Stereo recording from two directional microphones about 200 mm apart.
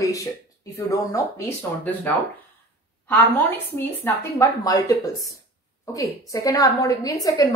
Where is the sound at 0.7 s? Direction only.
15° left (ahead or behind).